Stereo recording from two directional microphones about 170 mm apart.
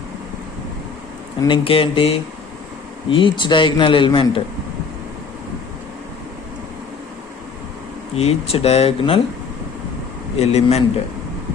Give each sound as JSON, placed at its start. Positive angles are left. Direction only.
{"t": 1.4, "sound": "a man's voice", "side_deg": 30}
{"t": 8.1, "sound": "speech", "side_deg": 35}
{"t": 10.3, "sound": "speech", "side_deg": 40}